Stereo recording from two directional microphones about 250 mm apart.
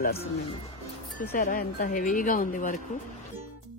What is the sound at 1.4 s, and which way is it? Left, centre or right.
A woman's voice, left.